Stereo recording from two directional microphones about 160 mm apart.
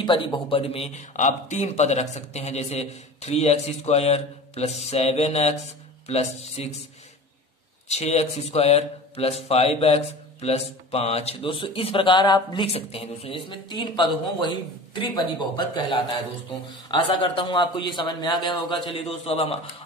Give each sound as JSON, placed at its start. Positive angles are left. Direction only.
{"t": 0.0, "sound": "a man's voice", "side_deg": 30}
{"t": 7.9, "sound": "a man's voice", "side_deg": 45}